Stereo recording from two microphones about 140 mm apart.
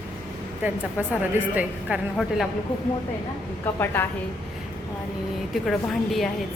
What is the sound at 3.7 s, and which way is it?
Speech, 15° left (ahead or behind).